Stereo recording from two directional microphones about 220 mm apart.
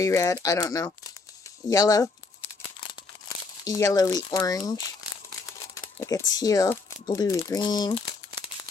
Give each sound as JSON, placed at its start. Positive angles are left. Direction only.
{"t": 0.0, "sound": "speech", "side_deg": 15}
{"t": 3.6, "sound": "speech", "side_deg": 15}
{"t": 5.7, "sound": "crumpling", "side_deg": 15}
{"t": 6.3, "sound": "speech", "side_deg": 15}